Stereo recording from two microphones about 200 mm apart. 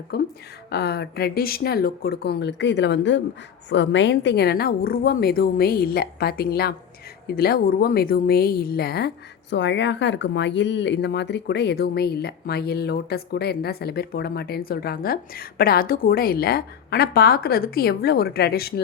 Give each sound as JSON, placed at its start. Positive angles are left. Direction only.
{"t": 0.1, "sound": "a woman's voice", "side_deg": 55}